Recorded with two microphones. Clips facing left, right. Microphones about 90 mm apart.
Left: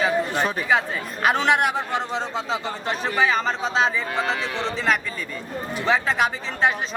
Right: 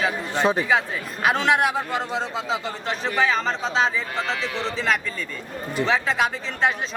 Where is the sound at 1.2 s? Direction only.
Centre (ahead or behind).